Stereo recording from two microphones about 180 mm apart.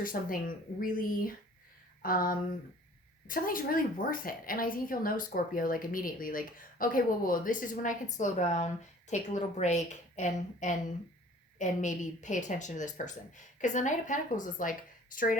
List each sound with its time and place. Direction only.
0.0 s a woman's voice: 50° left (ahead or behind)